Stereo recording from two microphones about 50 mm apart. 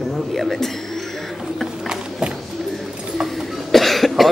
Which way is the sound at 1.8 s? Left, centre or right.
Centre.